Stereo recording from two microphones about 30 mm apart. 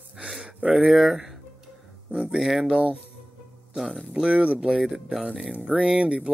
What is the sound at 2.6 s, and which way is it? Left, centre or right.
Speech, right.